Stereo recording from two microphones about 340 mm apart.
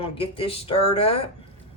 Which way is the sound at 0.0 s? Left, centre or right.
Centre.